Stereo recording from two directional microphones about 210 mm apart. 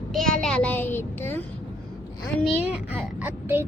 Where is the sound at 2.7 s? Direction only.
5° right (ahead or behind).